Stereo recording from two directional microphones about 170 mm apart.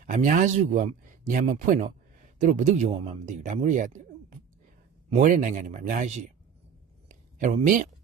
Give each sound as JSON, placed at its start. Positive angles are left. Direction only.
{"t": 0.0, "sound": "speech", "side_deg": -50}
{"t": 5.1, "sound": "speech", "side_deg": -45}
{"t": 7.1, "sound": "a sound", "side_deg": -45}